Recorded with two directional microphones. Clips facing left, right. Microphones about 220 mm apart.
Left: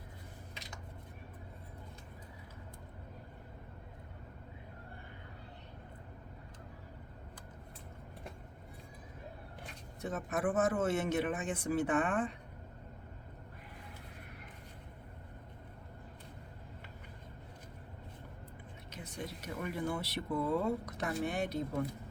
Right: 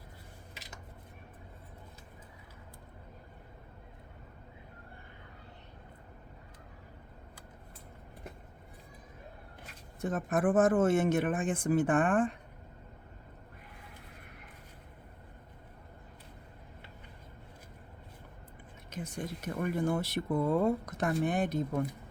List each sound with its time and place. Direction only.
10.0 s speech: 50° right (ahead or behind)
18.9 s speech: 50° right (ahead or behind)